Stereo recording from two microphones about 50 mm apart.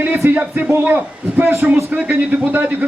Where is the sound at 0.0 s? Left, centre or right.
Right.